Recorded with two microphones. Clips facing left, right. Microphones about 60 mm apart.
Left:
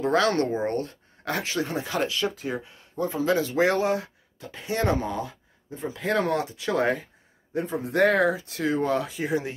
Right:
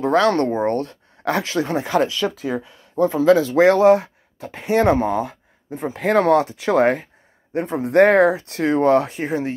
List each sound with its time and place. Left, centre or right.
0.0 s speech: right
9.2 s speech: right